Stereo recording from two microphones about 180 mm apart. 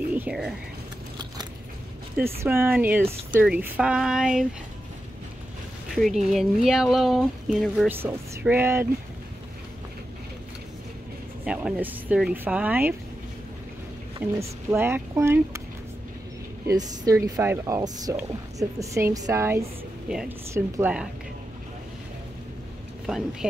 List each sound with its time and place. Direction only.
0.1 s speech: 5° right (ahead or behind)
2.1 s speech: 10° right (ahead or behind)
5.9 s speech: centre (ahead or behind)
7.9 s speech: 10° right (ahead or behind)
11.4 s speech: 5° right (ahead or behind)
14.2 s speech: 10° right (ahead or behind)
16.6 s speech: 20° right (ahead or behind)
20.1 s speech: 5° right (ahead or behind)
20.5 s speech: 15° right (ahead or behind)